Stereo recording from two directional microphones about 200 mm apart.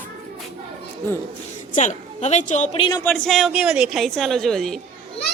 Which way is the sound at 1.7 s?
35° left (ahead or behind).